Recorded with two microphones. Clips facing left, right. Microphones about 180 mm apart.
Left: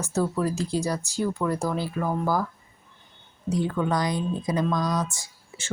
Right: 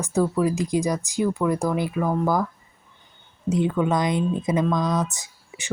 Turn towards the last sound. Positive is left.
turn(degrees=-20)  # may be behind; listen again after turning